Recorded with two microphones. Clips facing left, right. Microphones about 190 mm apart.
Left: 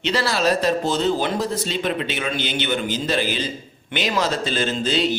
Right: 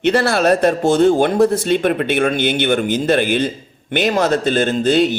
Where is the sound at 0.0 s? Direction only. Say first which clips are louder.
Right 6 dB; 55° right (ahead or behind).